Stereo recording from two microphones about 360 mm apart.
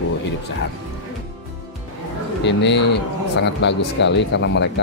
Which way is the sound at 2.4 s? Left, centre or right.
Left.